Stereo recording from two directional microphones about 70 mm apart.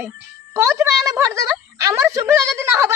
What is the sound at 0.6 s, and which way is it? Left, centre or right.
Speech, right.